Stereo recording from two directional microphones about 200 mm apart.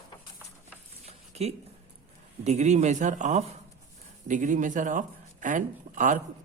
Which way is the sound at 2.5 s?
35° right (ahead or behind).